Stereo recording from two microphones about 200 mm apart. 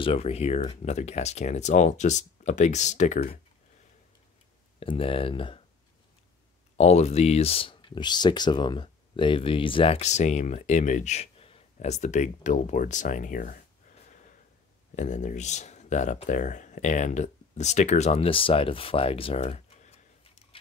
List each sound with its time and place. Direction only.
0.0 s speech: 30° left (ahead or behind)
4.7 s speech: 30° left (ahead or behind)
6.8 s speech: 35° left (ahead or behind)
15.0 s speech: 40° left (ahead or behind)